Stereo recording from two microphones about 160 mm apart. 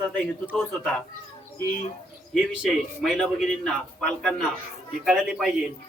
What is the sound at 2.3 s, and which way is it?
A man's voice, centre (ahead or behind).